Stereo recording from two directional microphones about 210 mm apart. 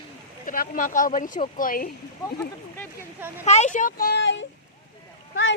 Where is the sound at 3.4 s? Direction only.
30° left (ahead or behind); by 4.5 s 55° left (ahead or behind).